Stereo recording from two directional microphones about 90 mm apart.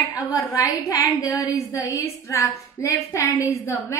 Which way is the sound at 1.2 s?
40° left (ahead or behind).